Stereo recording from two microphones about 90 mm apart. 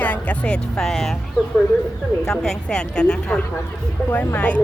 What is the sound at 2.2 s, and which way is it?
Speech, 5° left (ahead or behind).